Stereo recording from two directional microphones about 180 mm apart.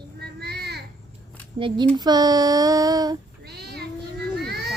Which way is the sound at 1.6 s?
30° right (ahead or behind).